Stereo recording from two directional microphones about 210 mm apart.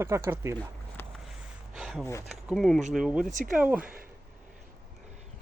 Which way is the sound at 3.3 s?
35° right (ahead or behind).